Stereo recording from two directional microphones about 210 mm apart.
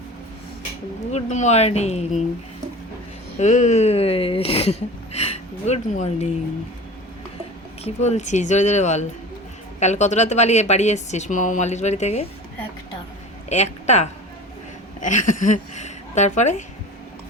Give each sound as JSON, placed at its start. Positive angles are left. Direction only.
{"t": 1.1, "sound": "speech", "side_deg": 35}
{"t": 3.3, "sound": "speech", "side_deg": 35}
{"t": 7.9, "sound": "speech", "side_deg": 35}
{"t": 13.5, "sound": "speech", "side_deg": 30}